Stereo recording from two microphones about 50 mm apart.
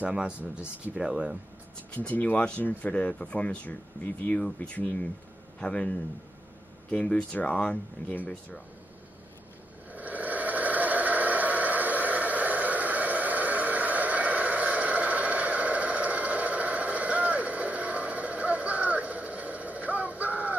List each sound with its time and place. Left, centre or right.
0.9 s speech: centre
2.0 s speech: left
5.6 s speech: left
8.1 s speech: left
9.9 s a sound: right